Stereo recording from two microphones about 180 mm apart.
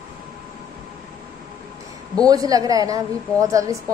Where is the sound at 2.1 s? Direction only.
20° right (ahead or behind).